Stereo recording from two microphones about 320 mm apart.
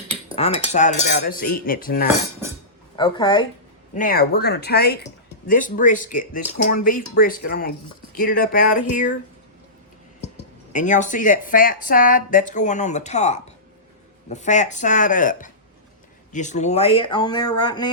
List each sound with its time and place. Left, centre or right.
0.3 s speech: centre
2.9 s speech: centre
3.9 s speech: left
10.3 s speech: left